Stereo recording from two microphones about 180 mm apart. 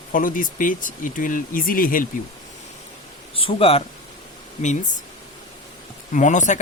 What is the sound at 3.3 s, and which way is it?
Speech, 30° left (ahead or behind).